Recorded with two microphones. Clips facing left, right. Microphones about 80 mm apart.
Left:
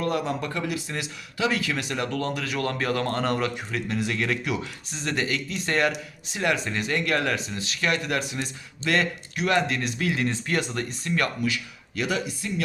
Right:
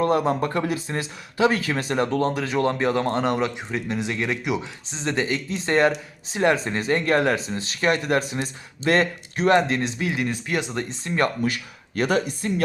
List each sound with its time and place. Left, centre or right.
0.0 s speech: right
10.0 s speech: centre
10.8 s speech: right
11.4 s speech: right